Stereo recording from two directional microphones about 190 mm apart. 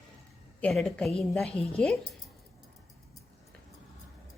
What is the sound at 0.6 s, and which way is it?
A woman's voice, centre (ahead or behind).